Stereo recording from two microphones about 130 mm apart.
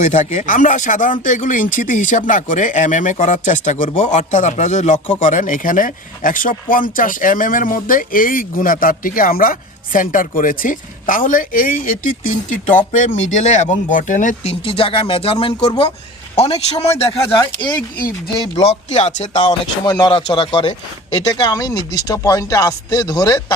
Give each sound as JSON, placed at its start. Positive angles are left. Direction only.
{"t": 0.0, "sound": "speech", "side_deg": 65}
{"t": 5.2, "sound": "speech", "side_deg": 80}
{"t": 14.6, "sound": "speech", "side_deg": 45}
{"t": 18.5, "sound": "speech", "side_deg": 55}
{"t": 19.8, "sound": "speech", "side_deg": 30}